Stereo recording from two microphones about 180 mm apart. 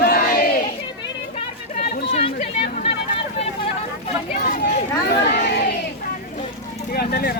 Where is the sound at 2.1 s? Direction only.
35° left (ahead or behind).